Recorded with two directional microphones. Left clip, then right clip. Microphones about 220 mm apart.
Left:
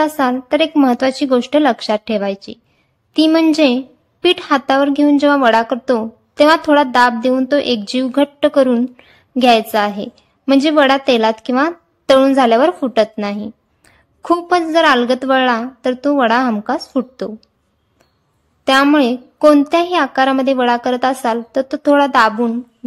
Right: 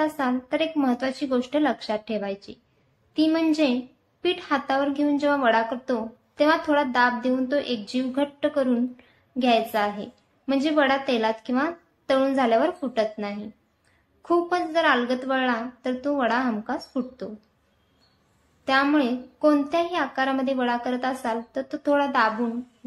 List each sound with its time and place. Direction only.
0.0 s a woman's voice: 50° left (ahead or behind)
18.6 s a woman's voice: 55° left (ahead or behind)